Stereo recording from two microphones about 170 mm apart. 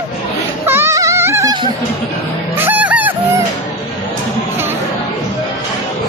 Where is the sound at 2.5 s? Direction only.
10° right (ahead or behind).